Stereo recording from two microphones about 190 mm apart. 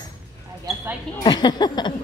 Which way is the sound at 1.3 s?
20° left (ahead or behind).